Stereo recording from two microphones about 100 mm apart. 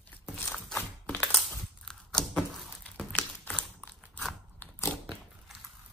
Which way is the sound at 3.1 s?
15° left (ahead or behind).